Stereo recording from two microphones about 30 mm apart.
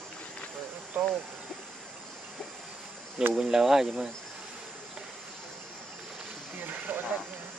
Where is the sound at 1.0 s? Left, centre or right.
Right.